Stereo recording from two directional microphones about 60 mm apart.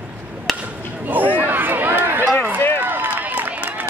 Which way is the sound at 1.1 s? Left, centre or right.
Right.